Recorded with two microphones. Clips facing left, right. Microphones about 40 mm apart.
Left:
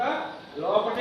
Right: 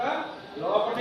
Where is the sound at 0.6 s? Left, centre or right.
Right.